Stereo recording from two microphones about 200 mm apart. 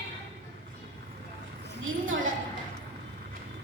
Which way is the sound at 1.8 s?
80° right.